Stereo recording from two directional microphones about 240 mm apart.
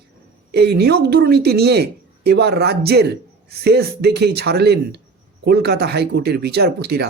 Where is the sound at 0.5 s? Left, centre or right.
Right.